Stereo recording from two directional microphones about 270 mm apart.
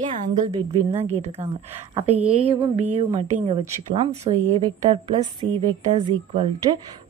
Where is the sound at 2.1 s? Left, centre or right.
Centre.